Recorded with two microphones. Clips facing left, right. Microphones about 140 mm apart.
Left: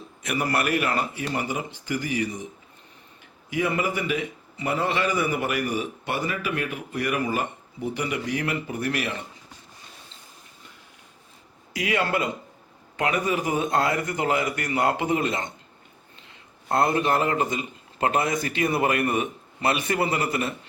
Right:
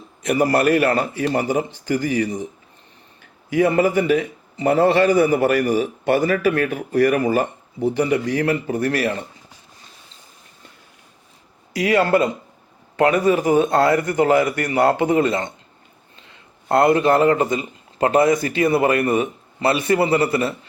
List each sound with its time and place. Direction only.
0.3 s a man's voice: 35° right (ahead or behind)
3.7 s a man's voice: 40° right (ahead or behind)
11.8 s a man's voice: 40° right (ahead or behind)
17.0 s a man's voice: 35° right (ahead or behind)